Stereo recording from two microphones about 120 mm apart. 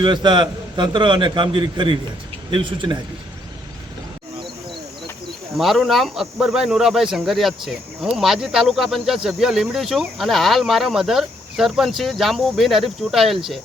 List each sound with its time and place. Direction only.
0.0 s a man's voice: 40° right (ahead or behind)
5.5 s speech: centre (ahead or behind)